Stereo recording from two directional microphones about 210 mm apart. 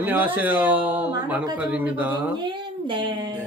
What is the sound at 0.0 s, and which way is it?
Speech, 10° right (ahead or behind).